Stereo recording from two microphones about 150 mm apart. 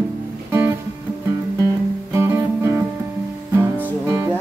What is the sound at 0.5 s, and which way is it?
Music, 15° right (ahead or behind).